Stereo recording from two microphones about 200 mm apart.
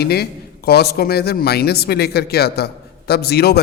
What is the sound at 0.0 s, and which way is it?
A man's voice, 50° left (ahead or behind).